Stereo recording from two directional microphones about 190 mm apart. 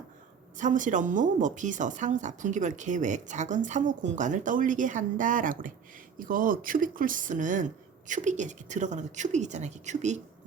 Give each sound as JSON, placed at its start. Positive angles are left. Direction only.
{"t": 0.5, "sound": "speech", "side_deg": -40}